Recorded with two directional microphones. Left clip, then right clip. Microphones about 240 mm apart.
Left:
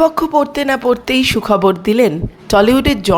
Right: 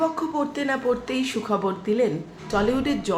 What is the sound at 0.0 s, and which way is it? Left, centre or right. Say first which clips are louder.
Speech: left 12 dB; left.